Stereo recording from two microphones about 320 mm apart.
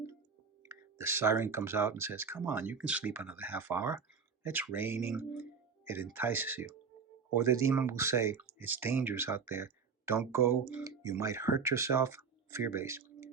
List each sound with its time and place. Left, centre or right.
0.7 s speech: centre